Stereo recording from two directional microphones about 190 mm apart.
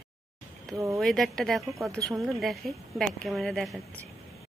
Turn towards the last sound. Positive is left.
turn(degrees=0)  # may be behind; listen again after turning